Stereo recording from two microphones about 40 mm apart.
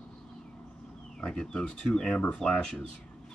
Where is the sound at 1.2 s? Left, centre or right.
Centre.